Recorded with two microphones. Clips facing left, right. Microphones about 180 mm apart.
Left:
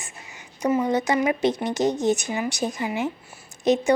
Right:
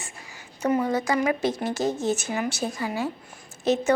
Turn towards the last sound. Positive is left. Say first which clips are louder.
# left 2 dB
turn(degrees=15)  # may be behind; listen again after turning